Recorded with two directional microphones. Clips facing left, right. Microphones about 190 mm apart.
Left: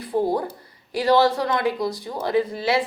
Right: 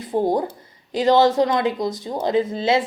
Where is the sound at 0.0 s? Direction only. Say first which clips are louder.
Right 2 dB; 20° right (ahead or behind).